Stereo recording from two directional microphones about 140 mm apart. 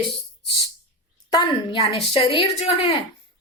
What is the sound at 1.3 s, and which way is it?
A woman's voice, 35° left (ahead or behind).